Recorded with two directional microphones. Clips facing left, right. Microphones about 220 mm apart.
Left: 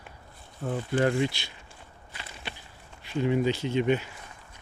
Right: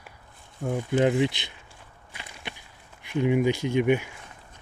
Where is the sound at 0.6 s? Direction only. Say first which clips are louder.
Right 3 dB; 15° right (ahead or behind).